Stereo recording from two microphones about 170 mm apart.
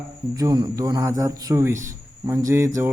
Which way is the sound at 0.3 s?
20° right (ahead or behind).